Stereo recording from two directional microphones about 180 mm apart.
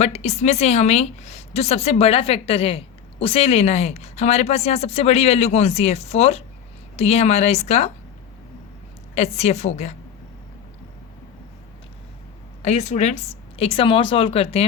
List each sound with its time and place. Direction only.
0.0 s a woman's voice: 40° left (ahead or behind)
9.1 s a woman's voice: 40° left (ahead or behind)
12.6 s a woman's voice: 40° left (ahead or behind)